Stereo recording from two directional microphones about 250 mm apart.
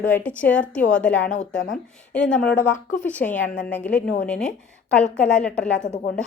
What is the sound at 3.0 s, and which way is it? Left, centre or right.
Speech, centre.